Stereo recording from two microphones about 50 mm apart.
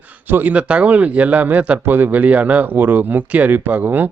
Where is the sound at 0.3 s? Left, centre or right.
Right.